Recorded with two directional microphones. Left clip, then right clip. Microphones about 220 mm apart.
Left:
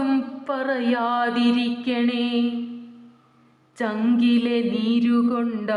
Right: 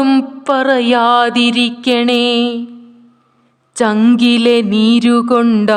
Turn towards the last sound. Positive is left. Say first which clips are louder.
# right 13 dB
turn(degrees=-55)  # may be behind; listen again after turning